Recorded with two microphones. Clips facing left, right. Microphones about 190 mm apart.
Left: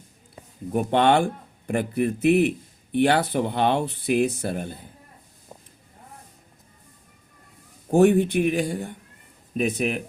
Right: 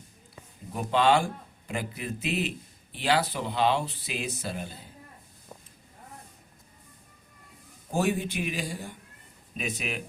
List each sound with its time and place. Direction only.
0.7 s speech: 60° left (ahead or behind)
7.9 s speech: 60° left (ahead or behind)